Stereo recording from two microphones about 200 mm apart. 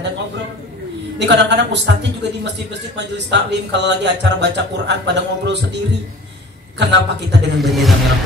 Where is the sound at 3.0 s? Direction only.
60° right (ahead or behind).